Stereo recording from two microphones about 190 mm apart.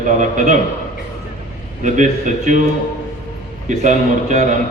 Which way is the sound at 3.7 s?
40° right (ahead or behind).